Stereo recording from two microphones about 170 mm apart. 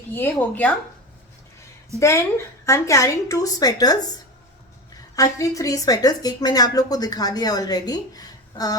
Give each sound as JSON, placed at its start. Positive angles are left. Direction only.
{"t": 0.1, "sound": "speech", "side_deg": 10}
{"t": 2.0, "sound": "a woman's voice", "side_deg": 15}
{"t": 5.1, "sound": "a woman's voice", "side_deg": 20}